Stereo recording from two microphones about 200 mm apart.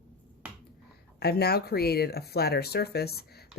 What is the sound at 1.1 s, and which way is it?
Speech, 50° left (ahead or behind).